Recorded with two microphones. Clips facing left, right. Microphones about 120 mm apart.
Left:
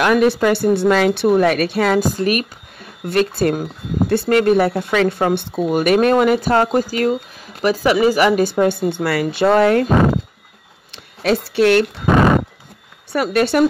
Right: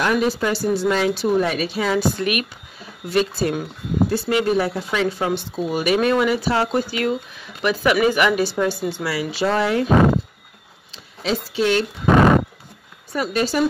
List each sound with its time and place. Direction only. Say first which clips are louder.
0.0 s speech: left 6 dB; 65° left (ahead or behind)
2.0 s speech: left 3 dB; 40° left (ahead or behind)
2.8 s speech: left 3 dB; 55° left (ahead or behind); by 8.5 s 35° left (ahead or behind)
8.5 s speech: left 5 dB; 55° left (ahead or behind)
9.8 s speech: left 1 dB; centre (ahead or behind)
11.4 s speech: left 6 dB; 65° left (ahead or behind)
12.1 s a sound: even; centre (ahead or behind)
13.1 s speech: left 5 dB; 65° left (ahead or behind)